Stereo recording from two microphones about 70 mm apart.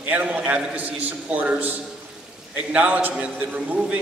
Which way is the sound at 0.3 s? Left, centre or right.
Right.